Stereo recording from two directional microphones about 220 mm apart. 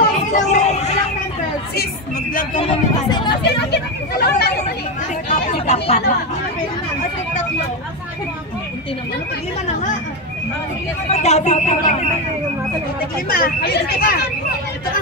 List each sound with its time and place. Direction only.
0.0 s a sound: 35° left (ahead or behind)
2.6 s speech: 25° left (ahead or behind)
3.4 s speech: 45° left (ahead or behind)
5.3 s speech: 30° left (ahead or behind)
11.1 s speech: 30° left (ahead or behind)
13.3 s speech: 45° left (ahead or behind)